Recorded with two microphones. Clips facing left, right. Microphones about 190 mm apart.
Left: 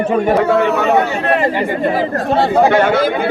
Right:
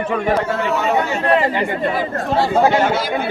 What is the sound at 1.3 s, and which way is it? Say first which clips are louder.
Speech: left 1 dB; 50° left (ahead or behind).